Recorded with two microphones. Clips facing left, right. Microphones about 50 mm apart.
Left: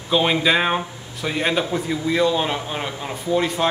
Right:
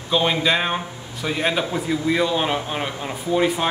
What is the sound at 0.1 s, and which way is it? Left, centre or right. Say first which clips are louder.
A man's voice: left 1 dB; centre.